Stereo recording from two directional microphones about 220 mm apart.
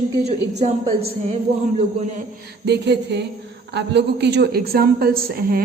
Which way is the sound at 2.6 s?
50° right (ahead or behind).